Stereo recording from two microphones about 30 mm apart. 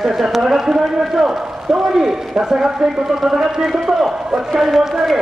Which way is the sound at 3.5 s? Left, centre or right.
Centre.